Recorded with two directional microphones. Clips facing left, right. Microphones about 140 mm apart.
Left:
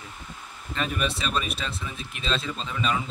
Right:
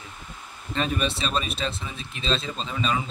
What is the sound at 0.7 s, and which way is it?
Speech, 30° right (ahead or behind).